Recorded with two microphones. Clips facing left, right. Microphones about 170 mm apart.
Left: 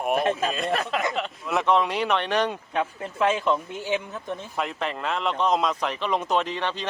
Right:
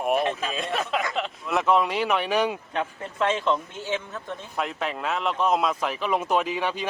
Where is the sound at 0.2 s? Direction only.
50° left (ahead or behind).